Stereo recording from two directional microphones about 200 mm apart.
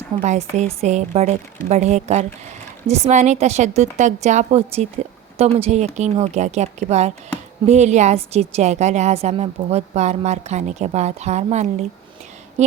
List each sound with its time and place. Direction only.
0.2 s a woman's voice: 35° right (ahead or behind)